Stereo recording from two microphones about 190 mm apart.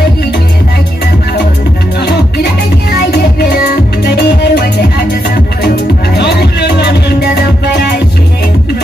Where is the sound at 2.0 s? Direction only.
60° left (ahead or behind).